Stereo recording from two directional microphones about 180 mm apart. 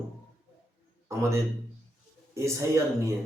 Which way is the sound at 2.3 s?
15° right (ahead or behind).